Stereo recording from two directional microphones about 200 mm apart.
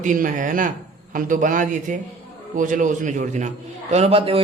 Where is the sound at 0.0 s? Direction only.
40° right (ahead or behind).